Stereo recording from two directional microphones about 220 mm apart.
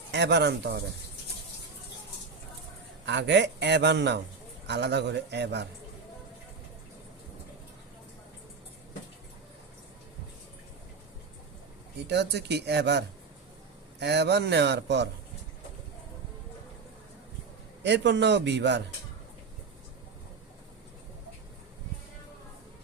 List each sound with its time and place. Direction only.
0.1 s a man's voice: 50° right (ahead or behind)
3.1 s a man's voice: 55° right (ahead or behind)
12.0 s a man's voice: 50° right (ahead or behind)
17.8 s a man's voice: 50° right (ahead or behind)